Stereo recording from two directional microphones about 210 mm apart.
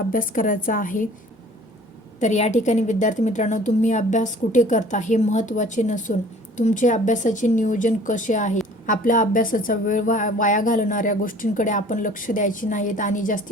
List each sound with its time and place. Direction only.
0.1 s a woman's voice: 40° left (ahead or behind)
2.2 s a woman's voice: 30° left (ahead or behind)